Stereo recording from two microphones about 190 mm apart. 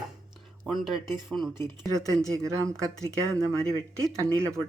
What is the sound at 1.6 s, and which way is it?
Speech, 15° right (ahead or behind).